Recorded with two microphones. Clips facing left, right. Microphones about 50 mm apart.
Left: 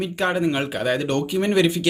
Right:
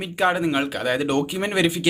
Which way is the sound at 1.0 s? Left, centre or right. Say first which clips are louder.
Left 1 dB; centre.